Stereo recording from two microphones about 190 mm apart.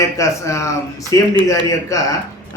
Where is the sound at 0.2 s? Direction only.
15° left (ahead or behind).